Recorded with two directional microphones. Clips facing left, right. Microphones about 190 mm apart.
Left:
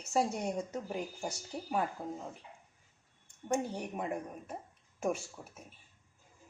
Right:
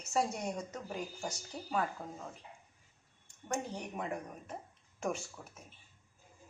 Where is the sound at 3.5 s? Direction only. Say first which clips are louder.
Left 4 dB; 10° left (ahead or behind).